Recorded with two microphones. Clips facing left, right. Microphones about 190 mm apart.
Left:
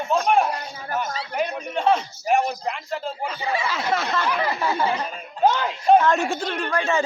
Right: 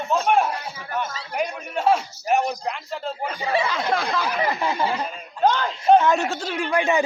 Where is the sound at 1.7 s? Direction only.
5° right (ahead or behind).